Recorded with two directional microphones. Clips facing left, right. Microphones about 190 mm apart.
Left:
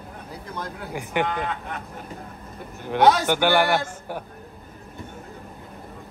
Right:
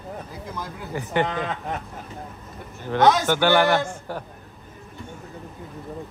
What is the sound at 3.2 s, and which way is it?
Speech, 10° left (ahead or behind).